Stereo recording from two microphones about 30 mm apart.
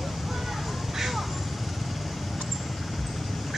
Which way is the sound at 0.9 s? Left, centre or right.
Centre.